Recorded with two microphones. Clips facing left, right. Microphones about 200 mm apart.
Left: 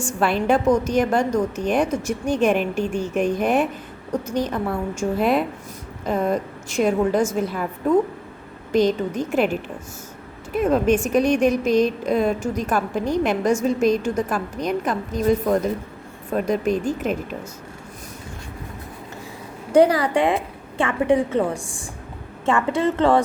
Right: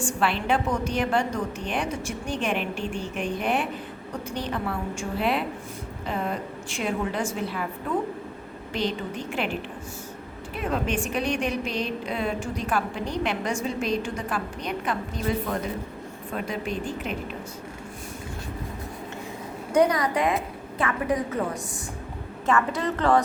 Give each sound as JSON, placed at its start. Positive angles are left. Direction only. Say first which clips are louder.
{"t": 0.0, "sound": "a woman's voice", "louder": "left 5 dB", "side_deg": 45}
{"t": 8.7, "sound": "a woman's voice", "louder": "left 10 dB", "side_deg": 45}
{"t": 19.7, "sound": "a woman's voice", "louder": "left 6 dB", "side_deg": 30}